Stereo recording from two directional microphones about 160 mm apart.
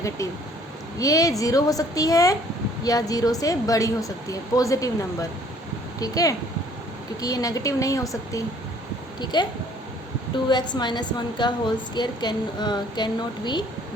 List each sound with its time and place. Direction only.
0.9 s a woman's voice: 20° left (ahead or behind)
6.0 s a woman's voice: 20° left (ahead or behind)